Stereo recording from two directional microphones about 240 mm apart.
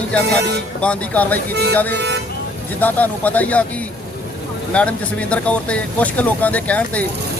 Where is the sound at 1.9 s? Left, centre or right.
Right.